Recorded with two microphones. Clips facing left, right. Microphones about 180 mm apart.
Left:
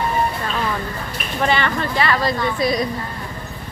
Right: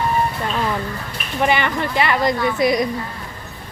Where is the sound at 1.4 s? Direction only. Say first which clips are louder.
Right 1 dB; 15° right (ahead or behind).